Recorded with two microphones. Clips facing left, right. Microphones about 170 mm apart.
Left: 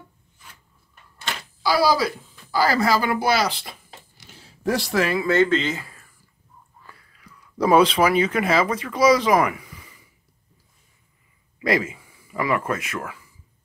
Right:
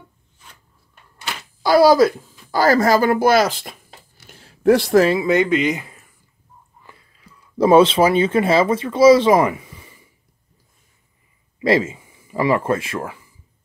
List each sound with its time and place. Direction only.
1.6 s speech: 50° right (ahead or behind)
4.3 s a sound: 55° right (ahead or behind)
5.0 s speech: 20° right (ahead or behind)
11.6 s speech: 25° right (ahead or behind)